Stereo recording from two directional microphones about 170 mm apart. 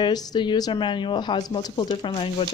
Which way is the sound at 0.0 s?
25° left (ahead or behind).